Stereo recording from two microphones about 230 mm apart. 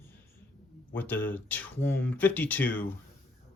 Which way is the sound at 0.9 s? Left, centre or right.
Centre.